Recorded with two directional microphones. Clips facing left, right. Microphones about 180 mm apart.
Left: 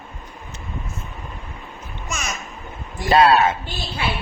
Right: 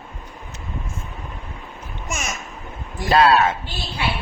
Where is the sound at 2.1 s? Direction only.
50° right (ahead or behind).